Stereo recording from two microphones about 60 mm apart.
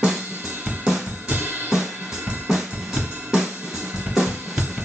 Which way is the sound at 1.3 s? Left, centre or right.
Right.